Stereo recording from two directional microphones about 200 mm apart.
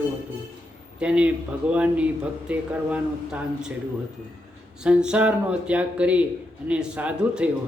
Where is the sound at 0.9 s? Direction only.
5° right (ahead or behind).